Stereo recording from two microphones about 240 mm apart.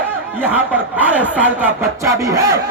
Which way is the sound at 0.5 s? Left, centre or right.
Centre.